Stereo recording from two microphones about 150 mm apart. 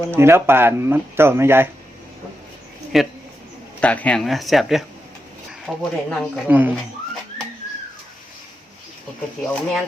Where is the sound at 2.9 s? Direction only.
Centre (ahead or behind).